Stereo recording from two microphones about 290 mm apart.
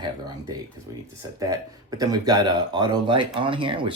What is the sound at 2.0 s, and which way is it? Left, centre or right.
Speech, centre.